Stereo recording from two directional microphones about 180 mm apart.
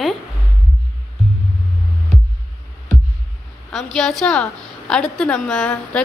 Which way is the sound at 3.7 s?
Centre (ahead or behind).